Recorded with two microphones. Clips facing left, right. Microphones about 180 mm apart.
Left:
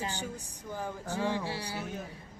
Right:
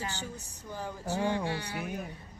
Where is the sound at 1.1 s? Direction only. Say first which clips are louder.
Right 2 dB; 30° right (ahead or behind).